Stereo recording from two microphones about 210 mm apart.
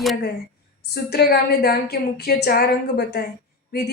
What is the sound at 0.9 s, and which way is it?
A woman's voice, 50° left (ahead or behind).